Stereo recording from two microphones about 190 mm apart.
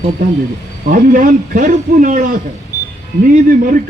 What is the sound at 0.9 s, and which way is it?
A man's voice, 45° right (ahead or behind).